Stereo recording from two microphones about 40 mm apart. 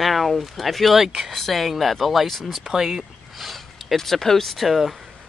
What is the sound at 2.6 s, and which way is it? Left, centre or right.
Speech, centre.